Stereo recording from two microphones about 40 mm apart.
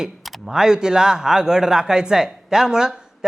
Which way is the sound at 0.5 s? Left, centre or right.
Centre.